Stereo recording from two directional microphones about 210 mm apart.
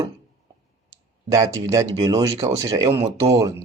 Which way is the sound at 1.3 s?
15° right (ahead or behind).